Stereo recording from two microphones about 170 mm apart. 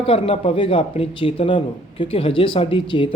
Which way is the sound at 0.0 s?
35° left (ahead or behind).